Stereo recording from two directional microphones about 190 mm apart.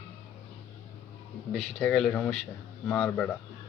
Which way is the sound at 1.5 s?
5° left (ahead or behind).